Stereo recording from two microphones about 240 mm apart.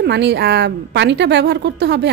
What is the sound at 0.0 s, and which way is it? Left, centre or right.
A woman's voice, right.